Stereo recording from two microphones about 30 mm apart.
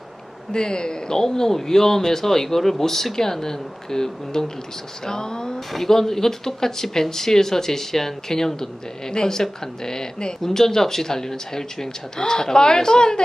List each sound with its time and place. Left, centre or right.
0.5 s speech: left
5.7 s speech: centre